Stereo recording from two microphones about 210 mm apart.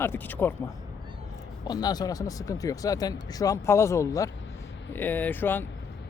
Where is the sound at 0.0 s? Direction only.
10° left (ahead or behind).